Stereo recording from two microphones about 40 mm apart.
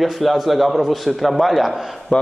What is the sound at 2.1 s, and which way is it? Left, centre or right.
Speech, left.